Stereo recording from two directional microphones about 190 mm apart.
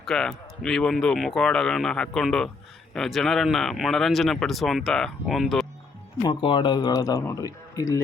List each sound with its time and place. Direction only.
0.0 s speech: 5° left (ahead or behind)
6.2 s speech: 25° left (ahead or behind)